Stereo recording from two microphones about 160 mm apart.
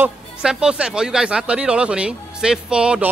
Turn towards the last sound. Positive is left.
turn(degrees=-5)  # may be behind; listen again after turning